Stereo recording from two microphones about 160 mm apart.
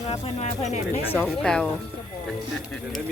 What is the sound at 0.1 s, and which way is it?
Speech, 45° left (ahead or behind).